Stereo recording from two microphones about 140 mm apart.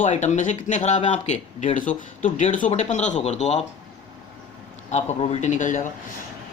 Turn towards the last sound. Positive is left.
turn(degrees=65)  # may be behind; listen again after turning